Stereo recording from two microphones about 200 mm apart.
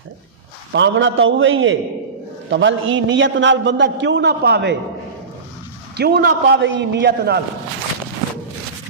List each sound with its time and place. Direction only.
0.7 s a man's voice: 65° right (ahead or behind)
2.5 s a man's voice: 65° right (ahead or behind)
6.0 s a man's voice: 55° right (ahead or behind)